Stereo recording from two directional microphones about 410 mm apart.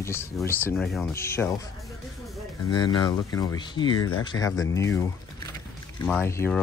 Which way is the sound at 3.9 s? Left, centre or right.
Left.